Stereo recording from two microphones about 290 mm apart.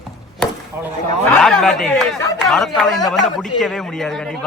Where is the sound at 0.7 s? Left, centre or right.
Centre.